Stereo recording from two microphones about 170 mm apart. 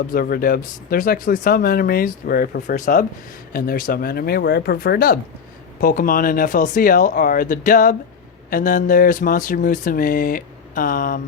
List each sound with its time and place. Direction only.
0.1 s speech: 60° left (ahead or behind)
2.7 s speech: 50° left (ahead or behind)
3.5 s speech: 60° left (ahead or behind)